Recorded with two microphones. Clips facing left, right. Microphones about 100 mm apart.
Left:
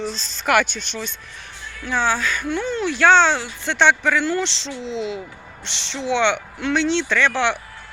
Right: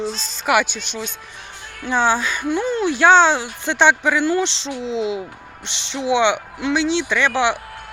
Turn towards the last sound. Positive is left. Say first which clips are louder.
# right 1 dB
turn(degrees=-10)  # may be behind; listen again after turning